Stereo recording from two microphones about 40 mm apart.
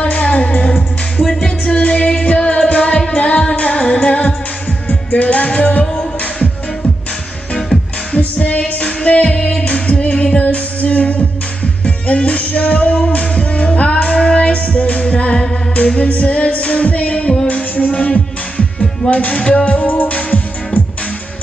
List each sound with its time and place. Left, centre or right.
0.0 s music: left
8.1 s music: left